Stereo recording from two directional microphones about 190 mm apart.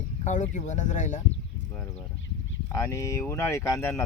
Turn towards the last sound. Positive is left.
turn(degrees=15)  # may be behind; listen again after turning